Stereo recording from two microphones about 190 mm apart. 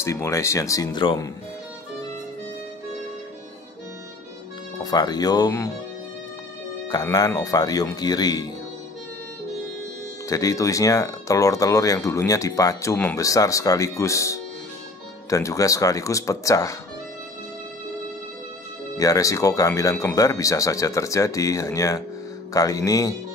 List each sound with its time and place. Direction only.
0.0 s speech: 15° left (ahead or behind)
4.7 s speech: 20° left (ahead or behind)
6.9 s speech: 20° left (ahead or behind)
10.2 s speech: 15° left (ahead or behind)
18.9 s speech: 20° left (ahead or behind)